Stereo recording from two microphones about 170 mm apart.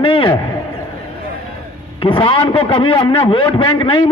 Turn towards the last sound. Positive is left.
turn(degrees=30)  # may be behind; listen again after turning